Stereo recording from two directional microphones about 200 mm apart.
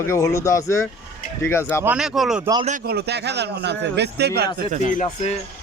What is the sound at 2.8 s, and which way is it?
A man's voice, 55° right (ahead or behind).